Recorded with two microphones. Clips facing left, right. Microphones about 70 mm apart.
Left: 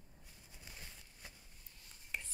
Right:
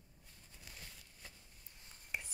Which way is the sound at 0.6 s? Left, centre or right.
Centre.